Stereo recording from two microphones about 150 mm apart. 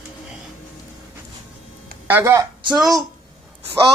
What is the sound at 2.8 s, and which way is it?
Speech, centre (ahead or behind).